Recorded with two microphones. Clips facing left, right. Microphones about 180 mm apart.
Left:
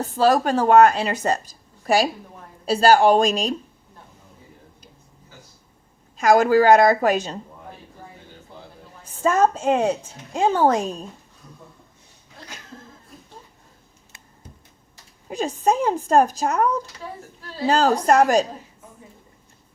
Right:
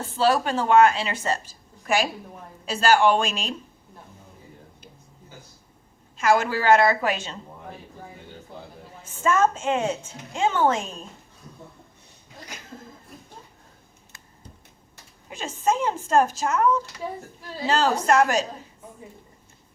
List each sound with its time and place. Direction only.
0.0 s a woman's voice: 40° left (ahead or behind)
6.1 s a woman's voice: 40° left (ahead or behind)
9.0 s a woman's voice: 35° left (ahead or behind)
15.3 s a woman's voice: 40° left (ahead or behind)